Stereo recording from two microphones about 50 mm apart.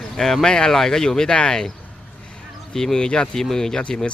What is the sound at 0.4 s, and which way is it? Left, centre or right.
Speech, centre.